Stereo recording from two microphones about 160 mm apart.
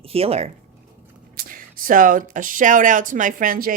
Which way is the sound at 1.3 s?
60° right (ahead or behind).